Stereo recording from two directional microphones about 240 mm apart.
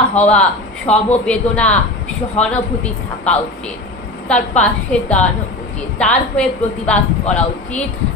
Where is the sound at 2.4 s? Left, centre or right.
Left.